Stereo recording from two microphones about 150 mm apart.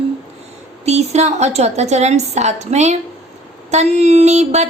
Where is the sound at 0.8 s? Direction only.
45° right (ahead or behind).